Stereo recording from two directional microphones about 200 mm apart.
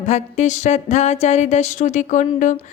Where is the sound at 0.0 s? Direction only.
35° left (ahead or behind).